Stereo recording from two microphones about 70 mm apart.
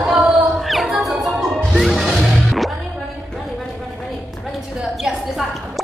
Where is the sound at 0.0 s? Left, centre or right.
Centre.